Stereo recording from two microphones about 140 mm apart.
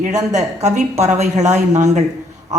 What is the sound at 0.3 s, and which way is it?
A woman's voice, 55° right (ahead or behind).